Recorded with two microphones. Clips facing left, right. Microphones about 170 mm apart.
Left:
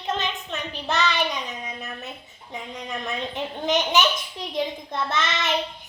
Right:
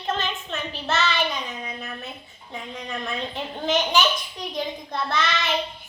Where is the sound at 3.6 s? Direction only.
20° left (ahead or behind).